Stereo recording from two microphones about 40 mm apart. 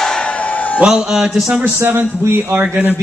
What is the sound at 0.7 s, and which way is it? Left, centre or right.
Speech, centre.